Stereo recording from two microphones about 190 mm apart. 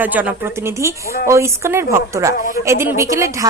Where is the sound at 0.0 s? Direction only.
10° right (ahead or behind).